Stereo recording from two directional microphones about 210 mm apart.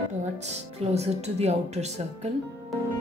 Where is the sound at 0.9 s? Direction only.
30° right (ahead or behind).